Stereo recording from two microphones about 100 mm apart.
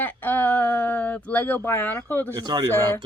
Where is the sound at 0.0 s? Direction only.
20° left (ahead or behind).